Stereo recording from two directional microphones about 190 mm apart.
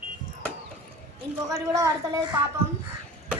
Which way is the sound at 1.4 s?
20° right (ahead or behind).